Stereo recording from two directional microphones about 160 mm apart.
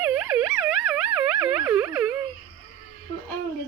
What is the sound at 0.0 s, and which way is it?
Siren, 5° right (ahead or behind).